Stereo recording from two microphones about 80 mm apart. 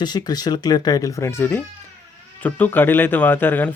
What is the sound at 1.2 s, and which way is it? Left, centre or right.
Speech, left.